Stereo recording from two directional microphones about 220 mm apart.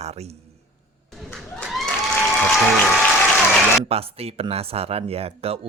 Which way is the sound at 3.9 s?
25° right (ahead or behind).